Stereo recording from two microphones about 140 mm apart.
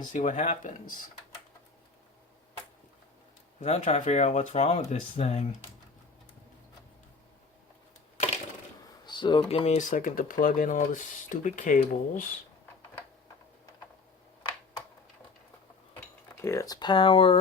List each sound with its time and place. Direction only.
0.0 s speech: 65° left (ahead or behind)
3.6 s speech: 55° left (ahead or behind)
9.0 s typing: 30° left (ahead or behind)
9.5 s speech: 50° left (ahead or behind); by 12.3 s 70° left (ahead or behind)
16.4 s speech: 20° left (ahead or behind); by 17.3 s 40° left (ahead or behind)